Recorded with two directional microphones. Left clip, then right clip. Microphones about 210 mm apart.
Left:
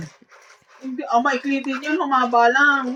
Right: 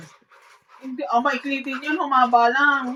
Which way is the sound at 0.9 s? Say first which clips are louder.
Left 2 dB; 25° right (ahead or behind).